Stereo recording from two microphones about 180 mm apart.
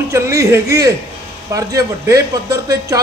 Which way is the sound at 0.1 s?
15° right (ahead or behind).